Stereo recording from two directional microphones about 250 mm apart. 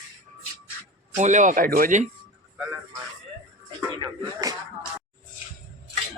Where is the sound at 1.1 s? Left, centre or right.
Right.